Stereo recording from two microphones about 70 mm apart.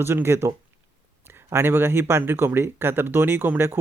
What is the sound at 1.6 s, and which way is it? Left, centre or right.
Speech, right.